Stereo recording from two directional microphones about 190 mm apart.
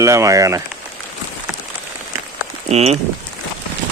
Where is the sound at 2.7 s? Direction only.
35° right (ahead or behind).